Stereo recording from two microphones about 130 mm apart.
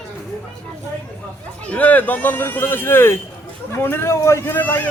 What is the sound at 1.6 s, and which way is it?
Speech, 10° left (ahead or behind).